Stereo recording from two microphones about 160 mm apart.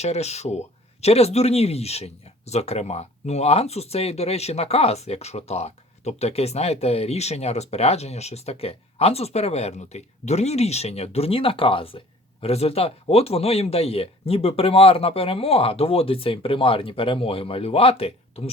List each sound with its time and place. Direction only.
0.0 s speech: 40° left (ahead or behind)